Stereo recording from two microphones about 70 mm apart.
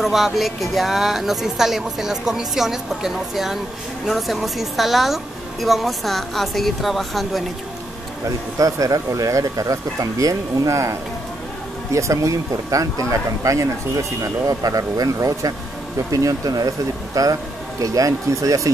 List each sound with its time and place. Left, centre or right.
0.0 s speech: centre
8.5 s speech: right